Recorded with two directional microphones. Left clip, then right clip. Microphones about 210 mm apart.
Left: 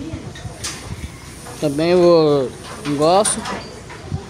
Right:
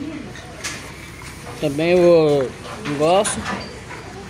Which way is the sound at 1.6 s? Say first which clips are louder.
Left 1 dB; 15° left (ahead or behind).